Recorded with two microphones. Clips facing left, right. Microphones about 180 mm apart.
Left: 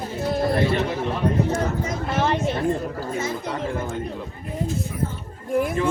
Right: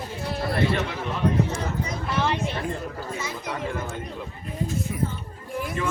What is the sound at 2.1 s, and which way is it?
Speech, 50° left (ahead or behind).